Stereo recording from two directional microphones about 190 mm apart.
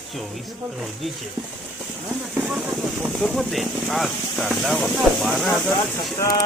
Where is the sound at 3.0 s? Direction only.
Centre (ahead or behind).